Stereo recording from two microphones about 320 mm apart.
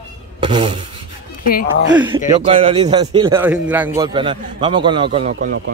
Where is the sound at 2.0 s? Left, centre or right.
Centre.